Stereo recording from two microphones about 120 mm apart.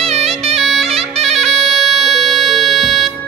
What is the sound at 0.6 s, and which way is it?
Bagpipes, centre (ahead or behind).